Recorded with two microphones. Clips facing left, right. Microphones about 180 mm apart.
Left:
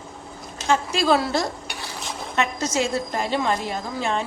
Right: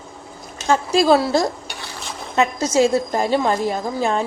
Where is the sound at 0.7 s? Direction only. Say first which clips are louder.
Right 5 dB; 35° right (ahead or behind).